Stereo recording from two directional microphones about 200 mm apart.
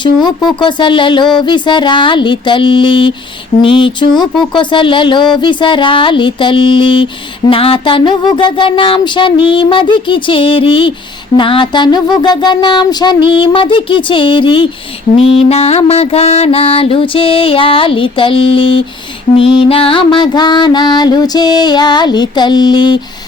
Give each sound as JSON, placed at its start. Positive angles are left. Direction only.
{"t": 0.6, "sound": "music", "side_deg": 25}
{"t": 4.1, "sound": "speech", "side_deg": 0}
{"t": 4.5, "sound": "music", "side_deg": 25}